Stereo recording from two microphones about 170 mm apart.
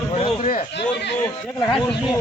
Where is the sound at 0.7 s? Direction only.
90° left.